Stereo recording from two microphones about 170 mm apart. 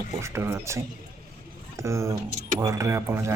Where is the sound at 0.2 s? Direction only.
15° right (ahead or behind).